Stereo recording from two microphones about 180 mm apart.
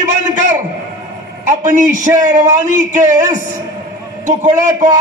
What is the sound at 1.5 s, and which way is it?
A man's voice, 45° right (ahead or behind).